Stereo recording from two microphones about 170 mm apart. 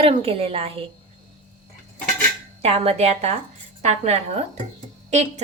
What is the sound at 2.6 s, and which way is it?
Speech, 35° right (ahead or behind).